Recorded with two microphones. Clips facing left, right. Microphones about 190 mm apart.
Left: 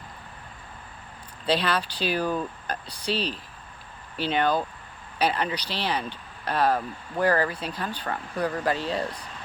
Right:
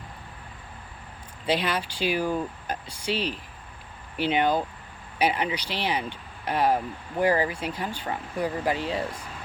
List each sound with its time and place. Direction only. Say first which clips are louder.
1.5 s speech: left 1 dB; 15° right (ahead or behind)